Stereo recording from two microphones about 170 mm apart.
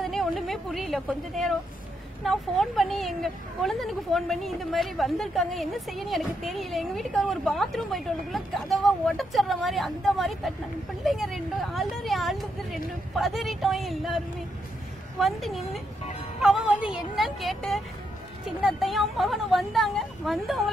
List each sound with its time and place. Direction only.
0.0 s a woman's voice: centre (ahead or behind)